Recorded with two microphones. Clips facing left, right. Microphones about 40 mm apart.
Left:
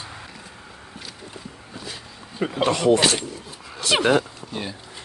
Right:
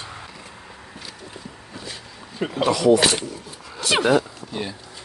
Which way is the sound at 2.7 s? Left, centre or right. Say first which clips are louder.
Right 2 dB; left.